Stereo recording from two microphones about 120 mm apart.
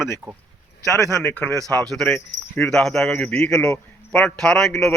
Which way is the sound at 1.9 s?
5° left (ahead or behind).